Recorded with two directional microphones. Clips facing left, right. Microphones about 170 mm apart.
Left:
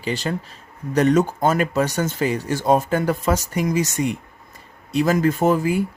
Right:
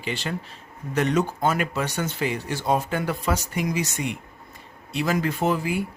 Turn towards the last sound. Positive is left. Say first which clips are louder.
# left 6 dB
turn(degrees=45)  # may be behind; listen again after turning